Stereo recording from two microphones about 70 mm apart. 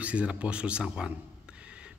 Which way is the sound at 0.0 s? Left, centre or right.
Centre.